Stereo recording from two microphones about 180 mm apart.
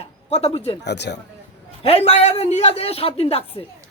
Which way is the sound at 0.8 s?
70° left (ahead or behind).